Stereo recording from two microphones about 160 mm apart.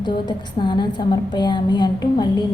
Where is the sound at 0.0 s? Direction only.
30° left (ahead or behind).